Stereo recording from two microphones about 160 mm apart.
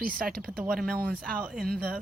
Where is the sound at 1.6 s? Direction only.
70° right (ahead or behind).